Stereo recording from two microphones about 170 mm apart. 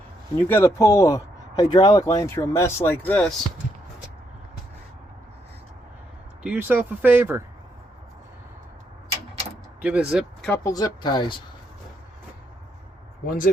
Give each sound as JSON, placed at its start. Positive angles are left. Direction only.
{"t": 0.3, "sound": "speech", "side_deg": 15}
{"t": 6.4, "sound": "speech", "side_deg": -10}
{"t": 9.8, "sound": "speech", "side_deg": -5}
{"t": 10.5, "sound": "speech", "side_deg": 20}
{"t": 13.2, "sound": "speech", "side_deg": 55}